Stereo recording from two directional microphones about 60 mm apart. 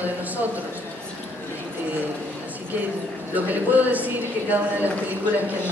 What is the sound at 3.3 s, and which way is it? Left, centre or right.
A man's voice, right.